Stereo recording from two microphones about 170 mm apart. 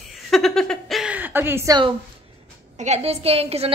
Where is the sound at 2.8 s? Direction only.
40° right (ahead or behind).